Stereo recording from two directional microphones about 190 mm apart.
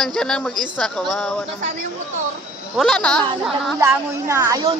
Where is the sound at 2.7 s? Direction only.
5° left (ahead or behind).